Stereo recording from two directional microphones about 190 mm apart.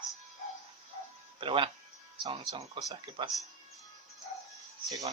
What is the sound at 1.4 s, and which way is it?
Speech, 25° right (ahead or behind).